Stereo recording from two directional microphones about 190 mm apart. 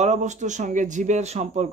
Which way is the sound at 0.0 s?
35° right (ahead or behind).